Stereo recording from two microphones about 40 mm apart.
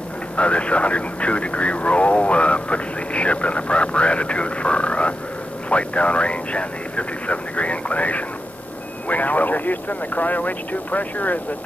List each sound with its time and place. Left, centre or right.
0.4 s speech: left